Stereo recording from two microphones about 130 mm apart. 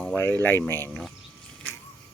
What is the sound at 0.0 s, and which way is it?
Speech, 10° left (ahead or behind).